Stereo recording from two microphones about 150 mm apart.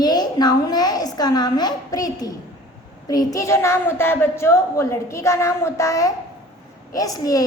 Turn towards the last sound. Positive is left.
turn(degrees=25)  # may be behind; listen again after turning